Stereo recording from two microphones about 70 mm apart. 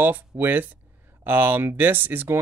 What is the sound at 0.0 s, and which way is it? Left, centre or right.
Speech, right.